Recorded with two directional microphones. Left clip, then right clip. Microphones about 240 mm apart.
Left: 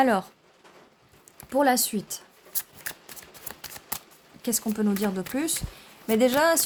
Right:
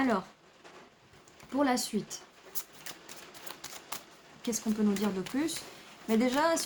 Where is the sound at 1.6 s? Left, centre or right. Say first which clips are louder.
Left 7 dB; left.